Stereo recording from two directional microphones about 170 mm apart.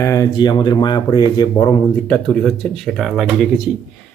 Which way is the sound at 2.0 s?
5° left (ahead or behind).